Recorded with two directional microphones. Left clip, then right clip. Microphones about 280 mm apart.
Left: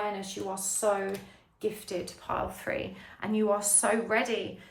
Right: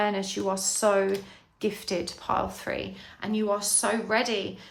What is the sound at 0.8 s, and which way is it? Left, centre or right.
A woman's voice, right.